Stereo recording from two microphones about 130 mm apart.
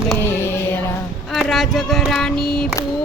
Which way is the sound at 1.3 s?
Centre (ahead or behind).